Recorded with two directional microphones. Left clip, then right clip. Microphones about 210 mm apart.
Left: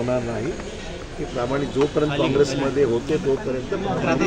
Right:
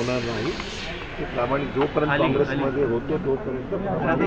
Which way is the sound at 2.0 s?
10° left (ahead or behind).